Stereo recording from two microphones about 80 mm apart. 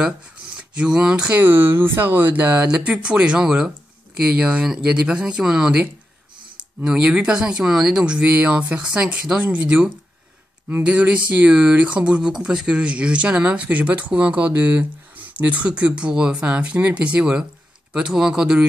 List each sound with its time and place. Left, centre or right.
0.6 s speech: centre